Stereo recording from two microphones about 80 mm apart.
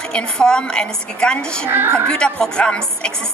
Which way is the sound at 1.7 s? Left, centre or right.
Right.